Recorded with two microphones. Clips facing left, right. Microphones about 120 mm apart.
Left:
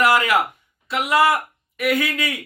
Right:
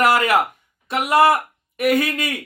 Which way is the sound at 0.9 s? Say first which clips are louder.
Right 2 dB; 45° right (ahead or behind).